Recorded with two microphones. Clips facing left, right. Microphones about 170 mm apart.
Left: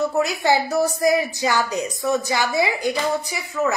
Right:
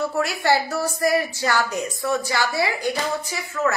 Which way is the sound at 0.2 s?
20° left (ahead or behind).